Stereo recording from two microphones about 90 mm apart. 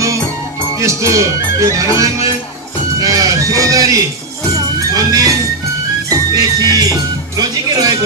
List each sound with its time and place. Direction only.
0.7 s speech: 35° right (ahead or behind)
6.0 s music: 45° right (ahead or behind)